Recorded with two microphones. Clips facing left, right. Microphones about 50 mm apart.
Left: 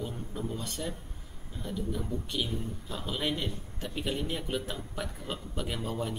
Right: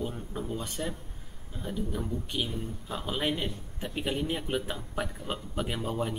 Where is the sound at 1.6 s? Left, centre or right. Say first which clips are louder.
Right 1 dB; centre.